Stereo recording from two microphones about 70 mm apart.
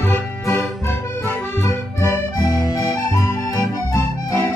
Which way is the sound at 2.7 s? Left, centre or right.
Left.